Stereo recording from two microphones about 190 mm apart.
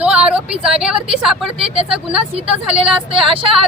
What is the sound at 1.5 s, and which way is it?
A woman's voice, 30° right (ahead or behind).